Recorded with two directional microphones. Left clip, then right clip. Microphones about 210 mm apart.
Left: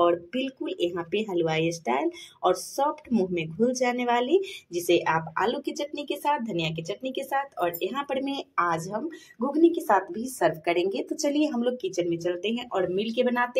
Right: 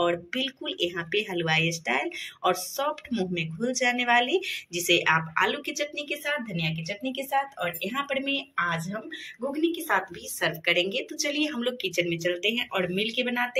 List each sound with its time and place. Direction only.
0.0 s speech: 40° left (ahead or behind)